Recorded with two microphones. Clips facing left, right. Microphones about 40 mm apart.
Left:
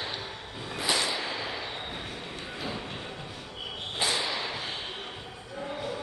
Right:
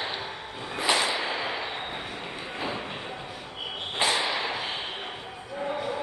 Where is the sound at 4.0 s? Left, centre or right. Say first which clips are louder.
Right 4 dB; right.